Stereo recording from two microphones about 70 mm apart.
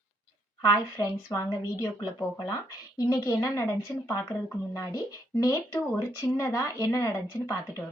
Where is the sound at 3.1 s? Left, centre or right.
Left.